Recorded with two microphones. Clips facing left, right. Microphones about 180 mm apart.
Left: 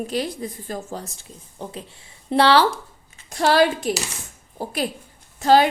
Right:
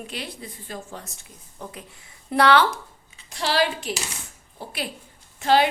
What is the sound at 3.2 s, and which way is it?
A woman's voice, 50° left (ahead or behind).